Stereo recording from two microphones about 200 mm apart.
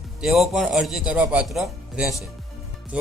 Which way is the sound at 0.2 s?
Centre (ahead or behind).